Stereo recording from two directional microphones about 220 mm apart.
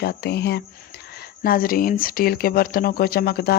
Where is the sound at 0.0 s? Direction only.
45° left (ahead or behind).